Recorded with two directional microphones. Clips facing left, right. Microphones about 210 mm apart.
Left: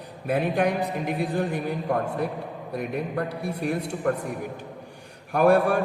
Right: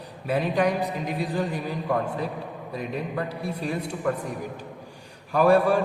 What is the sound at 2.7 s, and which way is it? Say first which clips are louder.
A woman's voice: left 2 dB; 60° left (ahead or behind).